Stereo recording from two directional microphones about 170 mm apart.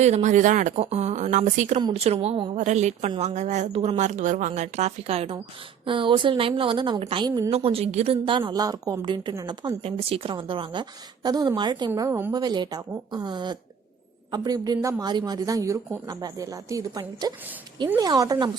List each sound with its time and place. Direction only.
0.0 s a woman's voice: 40° right (ahead or behind); by 7.5 s 25° right (ahead or behind)
7.5 s a woman's voice: 35° right (ahead or behind)
11.9 s a woman's voice: 15° right (ahead or behind)